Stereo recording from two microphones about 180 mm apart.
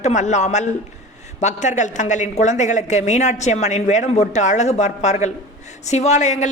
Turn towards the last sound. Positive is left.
turn(degrees=40)  # may be behind; listen again after turning